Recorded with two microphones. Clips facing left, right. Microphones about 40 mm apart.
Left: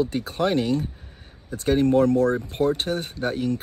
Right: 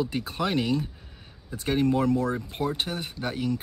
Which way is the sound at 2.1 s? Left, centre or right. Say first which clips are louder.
Left 5 dB; left.